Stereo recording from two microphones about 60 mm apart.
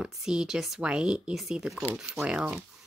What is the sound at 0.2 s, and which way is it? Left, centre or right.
Speech, centre.